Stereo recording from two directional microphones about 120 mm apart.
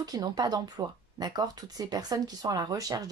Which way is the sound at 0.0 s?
30° right (ahead or behind).